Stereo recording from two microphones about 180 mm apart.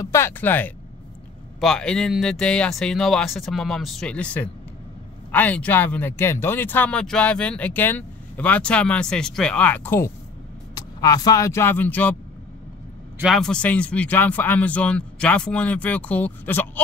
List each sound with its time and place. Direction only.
0.0 s speech: 15° left (ahead or behind)
13.2 s speech: centre (ahead or behind)